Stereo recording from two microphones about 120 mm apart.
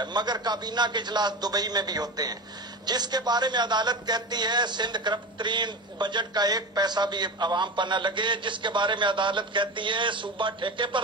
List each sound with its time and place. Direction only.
0.0 s a man's voice: 35° right (ahead or behind)